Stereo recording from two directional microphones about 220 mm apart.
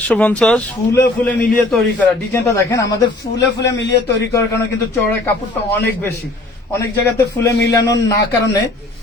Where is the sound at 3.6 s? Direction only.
50° left (ahead or behind).